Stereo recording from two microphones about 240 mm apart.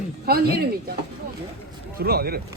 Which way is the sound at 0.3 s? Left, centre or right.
Right.